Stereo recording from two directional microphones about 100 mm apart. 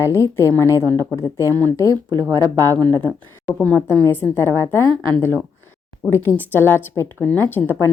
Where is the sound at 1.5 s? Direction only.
35° right (ahead or behind).